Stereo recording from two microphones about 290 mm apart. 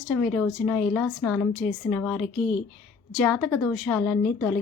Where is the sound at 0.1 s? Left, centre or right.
Centre.